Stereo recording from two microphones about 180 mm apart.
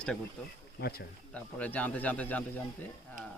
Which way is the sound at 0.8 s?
60° left (ahead or behind).